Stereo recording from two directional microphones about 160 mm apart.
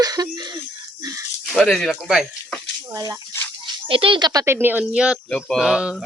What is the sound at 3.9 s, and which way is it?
A child's voice, 35° right (ahead or behind).